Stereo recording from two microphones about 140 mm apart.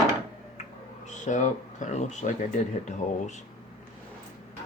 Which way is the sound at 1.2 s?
60° left (ahead or behind).